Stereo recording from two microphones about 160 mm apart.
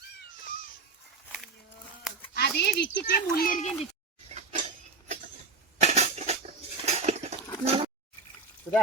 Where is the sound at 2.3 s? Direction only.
90° left.